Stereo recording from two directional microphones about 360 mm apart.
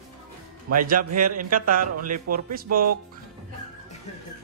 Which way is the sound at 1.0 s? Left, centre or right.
Right.